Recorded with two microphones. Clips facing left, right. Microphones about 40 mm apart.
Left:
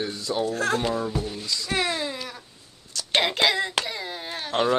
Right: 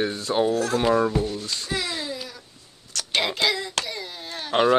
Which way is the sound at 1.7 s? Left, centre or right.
Left.